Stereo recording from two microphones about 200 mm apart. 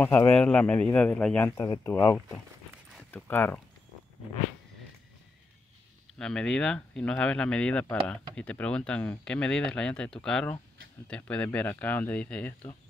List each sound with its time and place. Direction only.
0.3 s speech: 5° left (ahead or behind)
6.1 s speech: 5° left (ahead or behind)